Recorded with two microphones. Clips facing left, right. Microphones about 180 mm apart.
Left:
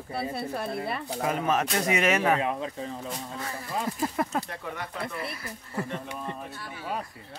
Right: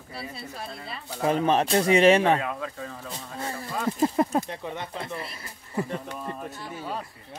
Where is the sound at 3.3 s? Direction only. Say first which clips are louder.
Right 3 dB; 30° right (ahead or behind).